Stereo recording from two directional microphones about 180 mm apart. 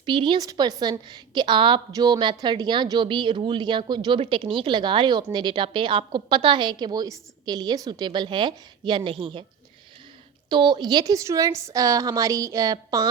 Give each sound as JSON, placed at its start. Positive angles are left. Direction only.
{"t": 0.0, "sound": "a woman's voice", "side_deg": -25}
{"t": 10.5, "sound": "a woman's voice", "side_deg": -25}